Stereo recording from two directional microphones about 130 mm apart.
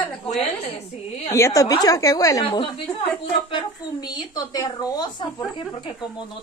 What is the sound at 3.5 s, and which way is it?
A woman's voice, 30° left (ahead or behind).